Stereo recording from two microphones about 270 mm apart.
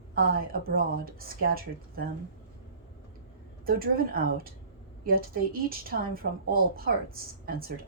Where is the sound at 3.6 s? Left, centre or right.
Right.